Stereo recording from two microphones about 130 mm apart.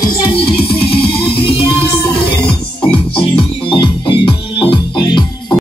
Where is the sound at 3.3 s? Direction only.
40° left (ahead or behind).